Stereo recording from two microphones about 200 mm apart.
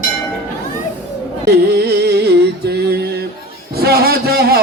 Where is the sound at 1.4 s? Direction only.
55° right (ahead or behind).